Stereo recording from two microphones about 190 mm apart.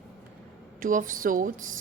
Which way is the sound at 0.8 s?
45° right (ahead or behind).